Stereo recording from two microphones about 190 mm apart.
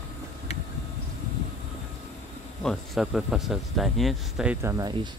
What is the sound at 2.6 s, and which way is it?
Speech, centre (ahead or behind).